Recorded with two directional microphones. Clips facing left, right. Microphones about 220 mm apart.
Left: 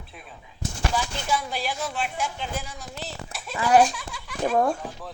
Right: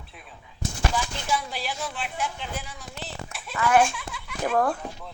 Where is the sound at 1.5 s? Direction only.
45° left (ahead or behind).